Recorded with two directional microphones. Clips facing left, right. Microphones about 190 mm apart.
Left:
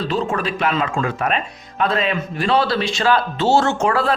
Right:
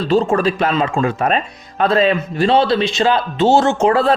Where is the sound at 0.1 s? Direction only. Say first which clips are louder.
Right 7 dB; 35° right (ahead or behind).